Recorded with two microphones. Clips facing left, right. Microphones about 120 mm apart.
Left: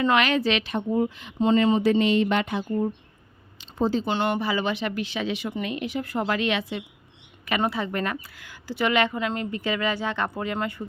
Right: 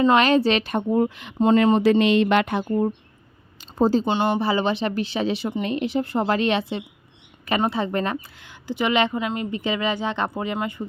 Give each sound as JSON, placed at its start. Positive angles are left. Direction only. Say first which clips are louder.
{"t": 0.0, "sound": "a woman's voice", "louder": "right 5 dB", "side_deg": -30}
{"t": 3.6, "sound": "a sound", "louder": "right 5 dB", "side_deg": -40}
{"t": 4.0, "sound": "a woman's voice", "louder": "right 3 dB", "side_deg": -20}